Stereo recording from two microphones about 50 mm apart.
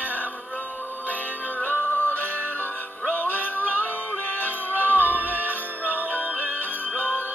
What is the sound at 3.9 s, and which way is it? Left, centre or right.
Music, left.